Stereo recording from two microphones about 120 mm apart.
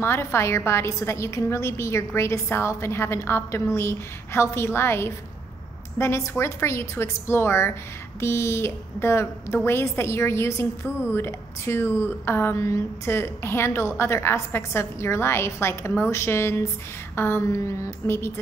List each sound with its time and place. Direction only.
0.0 s a woman's voice: 20° left (ahead or behind)